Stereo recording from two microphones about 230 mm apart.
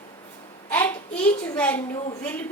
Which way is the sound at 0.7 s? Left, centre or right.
Centre.